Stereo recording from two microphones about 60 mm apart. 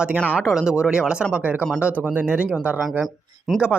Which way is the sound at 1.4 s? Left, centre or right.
Right.